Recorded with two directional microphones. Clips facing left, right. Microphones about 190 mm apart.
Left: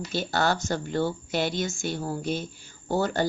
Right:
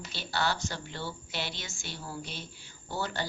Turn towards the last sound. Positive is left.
turn(degrees=45)  # may be behind; listen again after turning